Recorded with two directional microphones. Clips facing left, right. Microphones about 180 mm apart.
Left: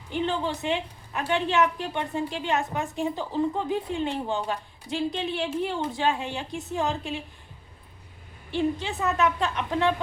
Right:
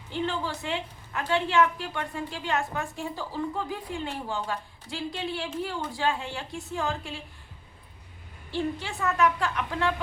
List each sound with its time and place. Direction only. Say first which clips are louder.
0.1 s a woman's voice: left 3 dB; 20° left (ahead or behind)
8.4 s a woman's voice: left 4 dB; 20° left (ahead or behind)